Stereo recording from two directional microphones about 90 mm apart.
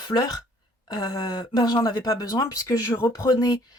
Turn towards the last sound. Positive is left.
turn(degrees=40)  # may be behind; listen again after turning